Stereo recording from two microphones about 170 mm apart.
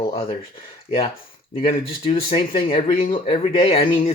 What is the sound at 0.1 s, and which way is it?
Speech, 35° left (ahead or behind).